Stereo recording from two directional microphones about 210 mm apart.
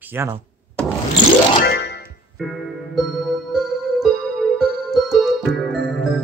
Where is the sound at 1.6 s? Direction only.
55° left (ahead or behind).